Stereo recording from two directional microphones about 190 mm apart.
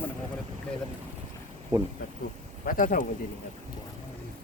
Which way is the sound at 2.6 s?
45° left (ahead or behind).